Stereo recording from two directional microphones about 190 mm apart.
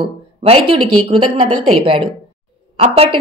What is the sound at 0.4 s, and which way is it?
A woman's voice, 30° right (ahead or behind).